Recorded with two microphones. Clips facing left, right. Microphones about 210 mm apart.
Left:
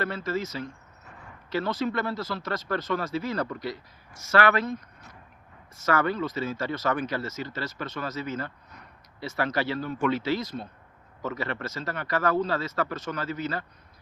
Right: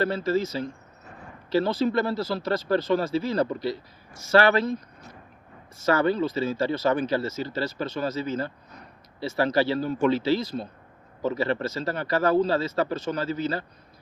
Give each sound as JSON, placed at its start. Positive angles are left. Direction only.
{"t": 0.0, "sound": "speech", "side_deg": -30}